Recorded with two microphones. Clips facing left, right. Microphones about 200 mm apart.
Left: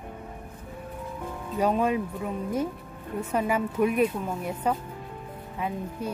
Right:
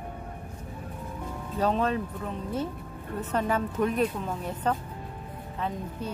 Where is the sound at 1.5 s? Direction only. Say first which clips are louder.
Left 2 dB; 10° left (ahead or behind).